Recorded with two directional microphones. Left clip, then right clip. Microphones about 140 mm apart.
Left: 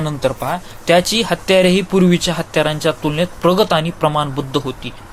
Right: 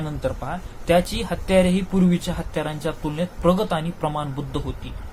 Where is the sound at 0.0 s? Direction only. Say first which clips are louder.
Left 9 dB; 35° left (ahead or behind).